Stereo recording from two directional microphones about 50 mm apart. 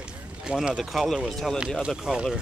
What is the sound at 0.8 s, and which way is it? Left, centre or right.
Speech, centre.